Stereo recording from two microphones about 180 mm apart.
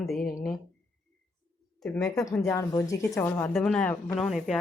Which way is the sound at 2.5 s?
20° left (ahead or behind).